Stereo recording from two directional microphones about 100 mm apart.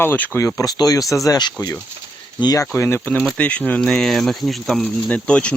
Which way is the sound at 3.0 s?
15° left (ahead or behind).